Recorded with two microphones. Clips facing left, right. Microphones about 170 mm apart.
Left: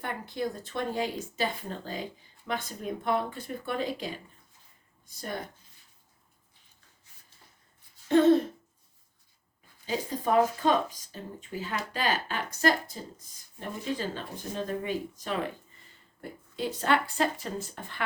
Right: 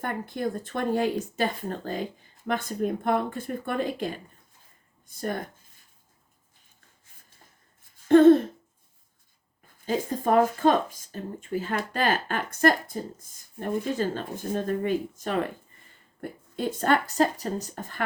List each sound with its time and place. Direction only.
0.0 s speech: 50° right (ahead or behind)
8.0 s hoot: 50° right (ahead or behind)
9.8 s speech: 50° right (ahead or behind)